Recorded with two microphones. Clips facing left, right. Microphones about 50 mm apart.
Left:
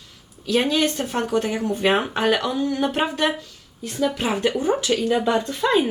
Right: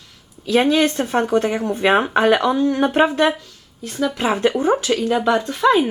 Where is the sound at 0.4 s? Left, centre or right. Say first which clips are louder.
Right 4 dB; centre.